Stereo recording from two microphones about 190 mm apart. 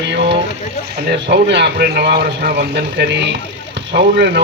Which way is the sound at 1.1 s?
60° right (ahead or behind).